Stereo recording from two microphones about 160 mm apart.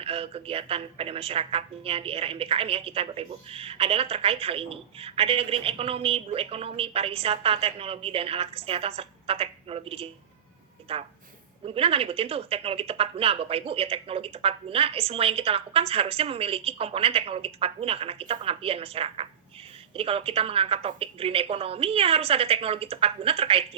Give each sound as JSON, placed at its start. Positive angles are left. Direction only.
{"t": 0.0, "sound": "a woman's voice", "side_deg": -35}